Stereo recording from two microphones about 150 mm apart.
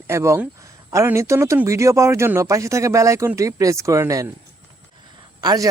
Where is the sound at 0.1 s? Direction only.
20° right (ahead or behind).